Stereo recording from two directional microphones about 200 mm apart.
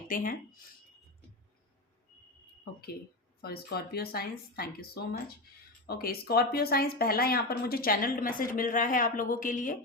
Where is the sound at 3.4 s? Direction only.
50° left (ahead or behind).